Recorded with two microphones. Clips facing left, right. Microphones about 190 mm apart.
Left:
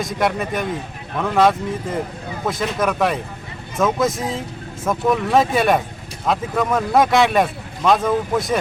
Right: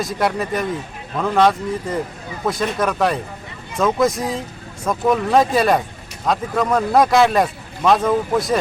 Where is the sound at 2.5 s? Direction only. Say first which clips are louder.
Right 1 dB; centre (ahead or behind).